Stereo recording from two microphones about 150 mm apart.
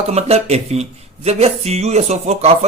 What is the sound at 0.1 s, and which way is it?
Speech, 45° right (ahead or behind).